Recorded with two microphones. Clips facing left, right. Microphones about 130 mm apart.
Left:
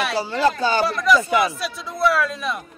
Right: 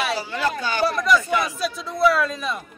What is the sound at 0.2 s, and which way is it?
Speech, 30° left (ahead or behind).